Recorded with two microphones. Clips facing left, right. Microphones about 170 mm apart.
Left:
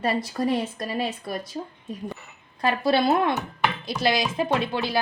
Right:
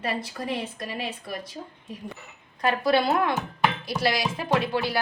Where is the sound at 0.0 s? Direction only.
40° left (ahead or behind).